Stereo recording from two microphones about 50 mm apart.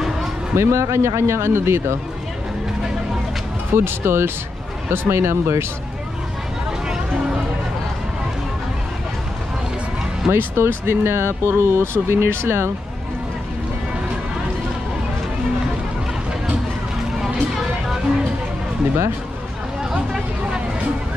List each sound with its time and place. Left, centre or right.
0.6 s a man's voice: right
3.7 s a man's voice: right
10.3 s speech: right
17.2 s a sound: centre